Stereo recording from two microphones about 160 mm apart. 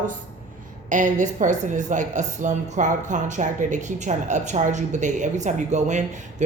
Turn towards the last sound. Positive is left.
turn(degrees=-50)  # may be behind; listen again after turning